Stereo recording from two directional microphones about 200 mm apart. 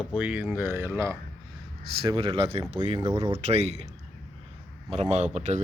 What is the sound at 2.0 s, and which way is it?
Speech, 25° right (ahead or behind).